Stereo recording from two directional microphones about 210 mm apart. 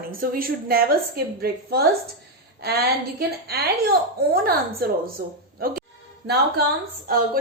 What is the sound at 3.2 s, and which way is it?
A woman's voice, 50° right (ahead or behind).